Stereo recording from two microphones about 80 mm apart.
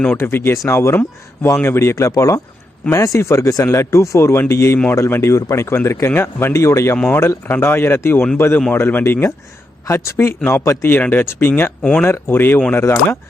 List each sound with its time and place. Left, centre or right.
0.2 s speech: left
9.8 s speech: left
11.0 s speech: left
11.8 s speech: centre
12.0 s speech: left